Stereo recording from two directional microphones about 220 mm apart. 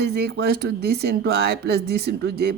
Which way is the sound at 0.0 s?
50° right (ahead or behind).